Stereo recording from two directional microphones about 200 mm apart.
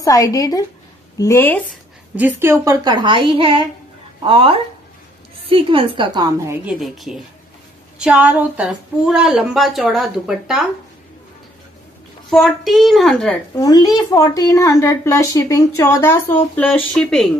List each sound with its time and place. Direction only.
0.0 s a child's voice: 15° left (ahead or behind)
2.1 s a woman's voice: 10° right (ahead or behind)
12.3 s speech: centre (ahead or behind)
13.6 s a child's voice: 20° left (ahead or behind)